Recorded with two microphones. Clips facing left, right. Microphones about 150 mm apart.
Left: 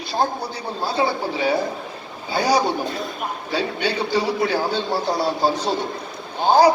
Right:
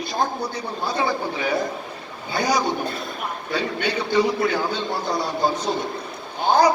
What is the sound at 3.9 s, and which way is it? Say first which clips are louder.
A man's voice: right 2 dB; 30° left (ahead or behind).